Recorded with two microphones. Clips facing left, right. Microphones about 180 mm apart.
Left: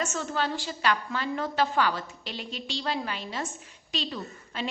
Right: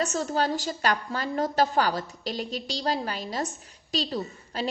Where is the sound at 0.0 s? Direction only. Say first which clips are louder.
Right 4 dB; 35° right (ahead or behind).